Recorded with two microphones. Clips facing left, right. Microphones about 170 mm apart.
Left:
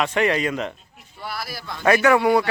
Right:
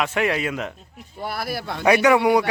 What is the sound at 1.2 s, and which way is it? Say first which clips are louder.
Speech: right 5 dB; 50° right (ahead or behind).